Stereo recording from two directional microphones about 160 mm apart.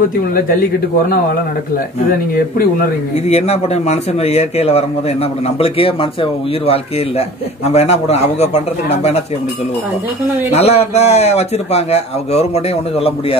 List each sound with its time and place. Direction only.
2.0 s speech: 65° left (ahead or behind)
3.3 s speech: 40° left (ahead or behind)
10.5 s speech: 40° left (ahead or behind)